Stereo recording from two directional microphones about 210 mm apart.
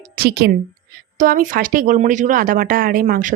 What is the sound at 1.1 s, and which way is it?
Speech, 40° right (ahead or behind).